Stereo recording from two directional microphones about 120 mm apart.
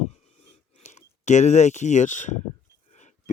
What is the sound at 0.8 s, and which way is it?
Speech, 80° left.